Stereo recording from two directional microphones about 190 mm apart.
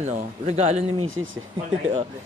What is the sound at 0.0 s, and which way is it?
Speech, 35° right (ahead or behind).